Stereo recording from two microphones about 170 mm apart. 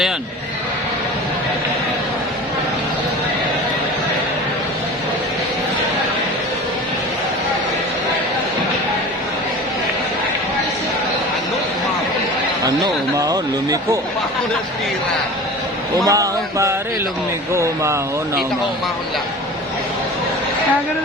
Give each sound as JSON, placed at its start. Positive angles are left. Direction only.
{"t": 12.6, "sound": "speech", "side_deg": -20}
{"t": 16.0, "sound": "speech", "side_deg": -20}